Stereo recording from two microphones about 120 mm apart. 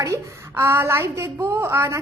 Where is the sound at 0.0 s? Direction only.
25° right (ahead or behind).